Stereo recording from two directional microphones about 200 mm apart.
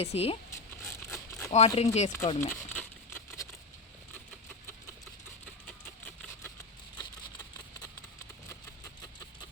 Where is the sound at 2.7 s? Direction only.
10° left (ahead or behind).